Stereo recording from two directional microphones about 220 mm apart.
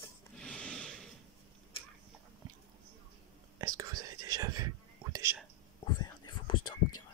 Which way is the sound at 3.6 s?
15° right (ahead or behind).